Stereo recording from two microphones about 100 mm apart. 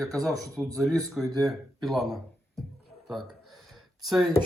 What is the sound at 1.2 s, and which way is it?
Speech, 5° right (ahead or behind).